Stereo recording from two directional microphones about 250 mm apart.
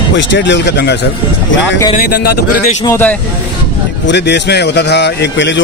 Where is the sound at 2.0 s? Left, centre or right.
Left.